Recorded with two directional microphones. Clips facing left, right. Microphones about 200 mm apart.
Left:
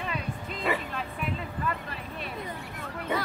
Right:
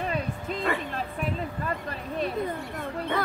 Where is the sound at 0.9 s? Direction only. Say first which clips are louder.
Right 3 dB; 40° right (ahead or behind).